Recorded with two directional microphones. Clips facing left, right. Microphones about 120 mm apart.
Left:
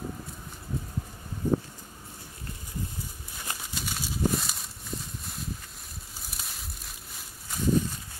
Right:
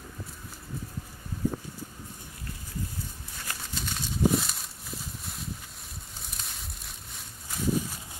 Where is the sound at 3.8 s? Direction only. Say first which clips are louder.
Right 3 dB; centre (ahead or behind).